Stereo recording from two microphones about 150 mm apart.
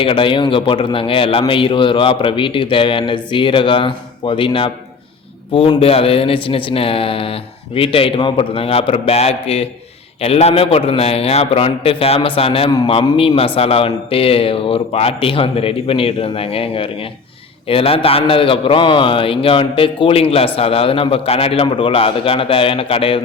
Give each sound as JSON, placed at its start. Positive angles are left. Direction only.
{"t": 0.0, "sound": "a man's voice", "side_deg": 35}